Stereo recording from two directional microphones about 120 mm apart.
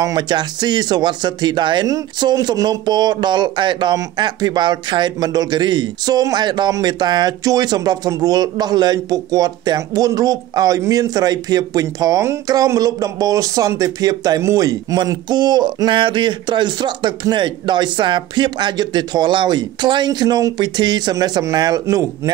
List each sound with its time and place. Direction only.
0.0 s speech: 35° right (ahead or behind)